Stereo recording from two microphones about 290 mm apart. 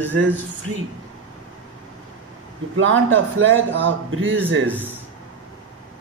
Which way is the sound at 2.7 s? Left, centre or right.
Right.